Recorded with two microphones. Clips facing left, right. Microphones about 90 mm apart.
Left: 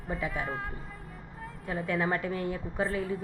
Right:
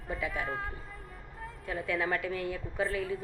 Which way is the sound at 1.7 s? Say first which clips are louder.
Left 2 dB; 25° left (ahead or behind).